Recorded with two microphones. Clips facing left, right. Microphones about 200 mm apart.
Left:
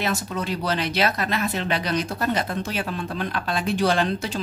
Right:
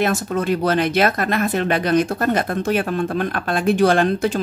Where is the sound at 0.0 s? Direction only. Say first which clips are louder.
Right 7 dB; 50° right (ahead or behind).